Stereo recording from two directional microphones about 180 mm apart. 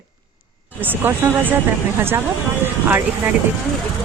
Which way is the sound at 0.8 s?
10° right (ahead or behind).